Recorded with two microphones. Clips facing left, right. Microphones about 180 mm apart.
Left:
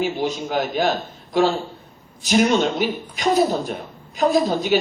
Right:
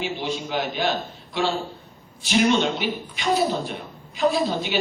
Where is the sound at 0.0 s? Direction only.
40° left (ahead or behind).